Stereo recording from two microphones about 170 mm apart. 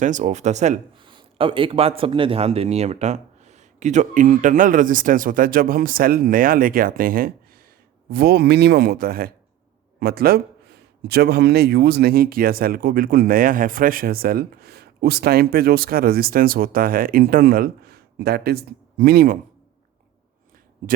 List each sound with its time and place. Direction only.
0.0 s a man's voice: 45° right (ahead or behind)
0.9 s a man's voice: 30° right (ahead or behind); by 19.4 s 65° right (ahead or behind)